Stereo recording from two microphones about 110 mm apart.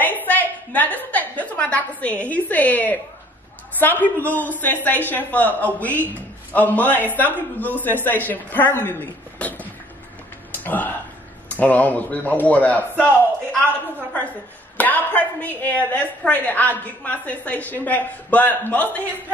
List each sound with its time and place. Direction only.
0.0 s a woman's voice: 15° left (ahead or behind)
9.4 s beatboxing: 15° left (ahead or behind)
10.6 s a woman's voice: 15° left (ahead or behind)
14.8 s a woman's voice: 15° left (ahead or behind)